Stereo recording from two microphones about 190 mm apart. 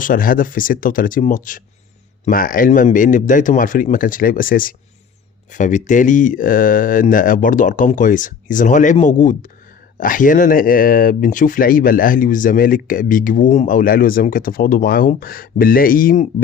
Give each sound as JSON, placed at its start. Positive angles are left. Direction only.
{"t": 0.0, "sound": "speech", "side_deg": 45}